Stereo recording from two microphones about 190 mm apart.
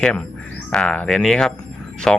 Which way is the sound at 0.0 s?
5° left (ahead or behind).